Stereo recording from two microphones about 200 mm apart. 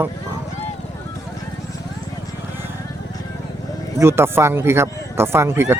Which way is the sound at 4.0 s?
10° right (ahead or behind).